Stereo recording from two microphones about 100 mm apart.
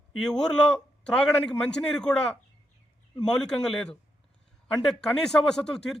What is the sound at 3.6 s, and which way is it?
A man's voice, 5° left (ahead or behind).